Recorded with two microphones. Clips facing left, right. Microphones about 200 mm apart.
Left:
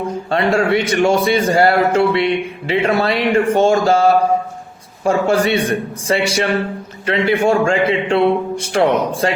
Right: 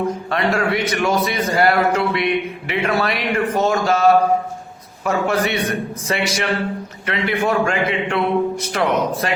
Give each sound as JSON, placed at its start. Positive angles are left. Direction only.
{"t": 0.3, "sound": "a man's voice", "side_deg": 30}